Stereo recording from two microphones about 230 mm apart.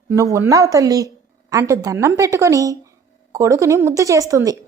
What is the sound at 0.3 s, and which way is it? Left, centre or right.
A woman's voice, centre.